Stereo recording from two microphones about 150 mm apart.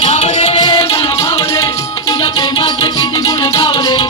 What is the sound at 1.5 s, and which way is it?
Music, 25° left (ahead or behind).